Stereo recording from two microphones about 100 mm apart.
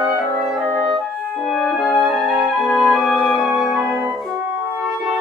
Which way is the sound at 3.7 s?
20° right (ahead or behind).